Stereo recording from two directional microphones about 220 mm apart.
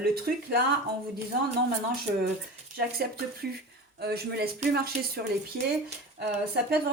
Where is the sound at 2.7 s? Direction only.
45° right (ahead or behind).